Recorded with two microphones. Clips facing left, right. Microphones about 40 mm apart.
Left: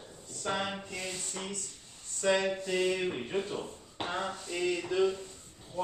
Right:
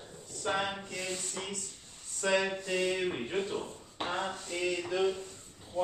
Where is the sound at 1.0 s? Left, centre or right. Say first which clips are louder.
Right 1 dB; right.